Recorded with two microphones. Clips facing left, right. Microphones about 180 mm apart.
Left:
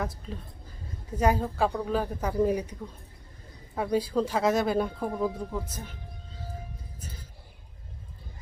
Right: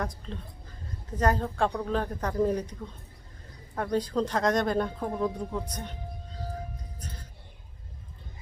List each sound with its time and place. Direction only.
0.0 s speech: 5° left (ahead or behind)
3.8 s speech: 10° left (ahead or behind)